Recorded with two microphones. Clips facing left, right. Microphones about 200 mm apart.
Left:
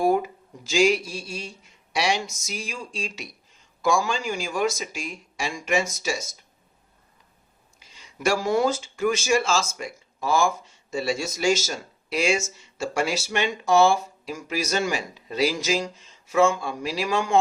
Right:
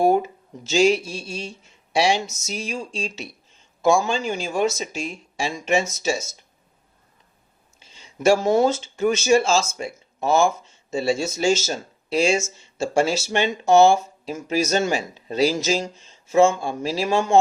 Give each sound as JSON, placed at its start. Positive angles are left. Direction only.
{"t": 0.0, "sound": "speech", "side_deg": -25}
{"t": 7.8, "sound": "speech", "side_deg": -25}